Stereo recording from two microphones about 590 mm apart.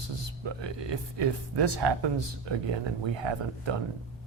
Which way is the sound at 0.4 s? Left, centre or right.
Right.